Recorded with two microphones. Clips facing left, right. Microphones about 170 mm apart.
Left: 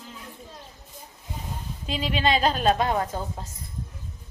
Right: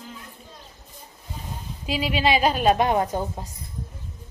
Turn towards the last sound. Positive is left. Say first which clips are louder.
# right 4 dB
turn(degrees=-20)  # may be behind; listen again after turning